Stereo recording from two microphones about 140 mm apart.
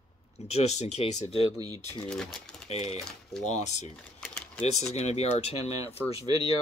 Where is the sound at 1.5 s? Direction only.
25° right (ahead or behind).